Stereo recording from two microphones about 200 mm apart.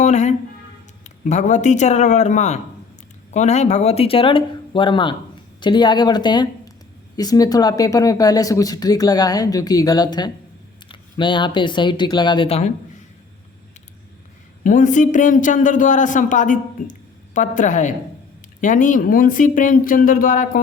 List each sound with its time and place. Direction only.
0.0 s speech: 35° left (ahead or behind)
14.6 s speech: 40° left (ahead or behind)